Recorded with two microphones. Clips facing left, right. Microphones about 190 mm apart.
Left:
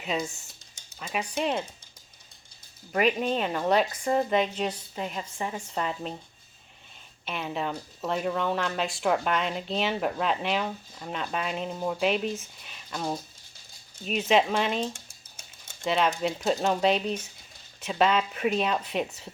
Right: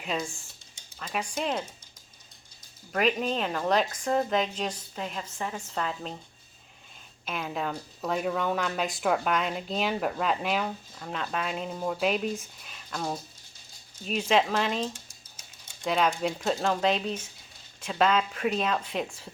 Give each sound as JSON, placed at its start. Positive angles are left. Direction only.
{"t": 0.0, "sound": "speech", "side_deg": 0}
{"t": 2.9, "sound": "a woman's voice", "side_deg": 5}
{"t": 7.3, "sound": "speech", "side_deg": 0}